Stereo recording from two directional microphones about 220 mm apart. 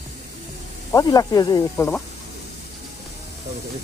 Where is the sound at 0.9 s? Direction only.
15° left (ahead or behind).